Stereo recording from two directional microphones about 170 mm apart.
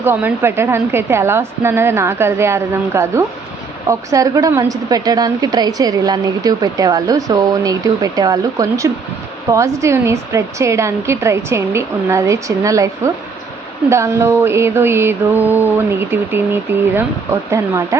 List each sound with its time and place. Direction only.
0.0 s a woman's voice: 10° right (ahead or behind)
13.9 s a woman's voice: 15° right (ahead or behind)